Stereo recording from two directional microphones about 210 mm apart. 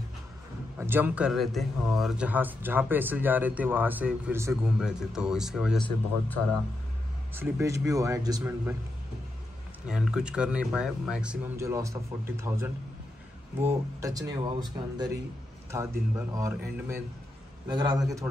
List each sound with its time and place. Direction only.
0.7 s speech: 10° right (ahead or behind); by 6.4 s 5° left (ahead or behind)
7.3 s speech: 10° right (ahead or behind)
9.8 s speech: 5° right (ahead or behind); by 18.0 s 20° right (ahead or behind)